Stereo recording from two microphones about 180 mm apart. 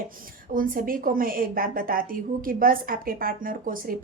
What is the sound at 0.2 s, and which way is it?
A woman's voice, 50° right (ahead or behind).